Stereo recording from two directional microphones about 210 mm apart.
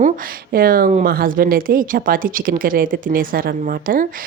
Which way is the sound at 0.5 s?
45° right (ahead or behind).